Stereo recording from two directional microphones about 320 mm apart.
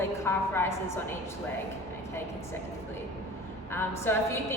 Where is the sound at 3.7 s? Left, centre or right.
Centre.